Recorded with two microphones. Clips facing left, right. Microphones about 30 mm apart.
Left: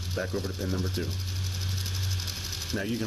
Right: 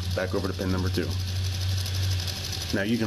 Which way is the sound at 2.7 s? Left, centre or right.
Right.